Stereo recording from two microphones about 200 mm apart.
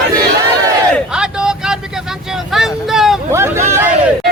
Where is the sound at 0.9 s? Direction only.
5° right (ahead or behind).